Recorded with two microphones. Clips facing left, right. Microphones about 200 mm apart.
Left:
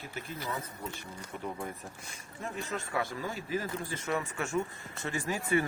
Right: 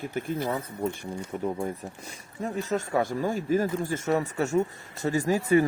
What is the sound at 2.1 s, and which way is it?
Speech, 40° right (ahead or behind).